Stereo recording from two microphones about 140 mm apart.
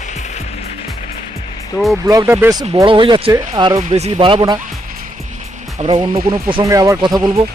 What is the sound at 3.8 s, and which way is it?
Speech, 50° right (ahead or behind).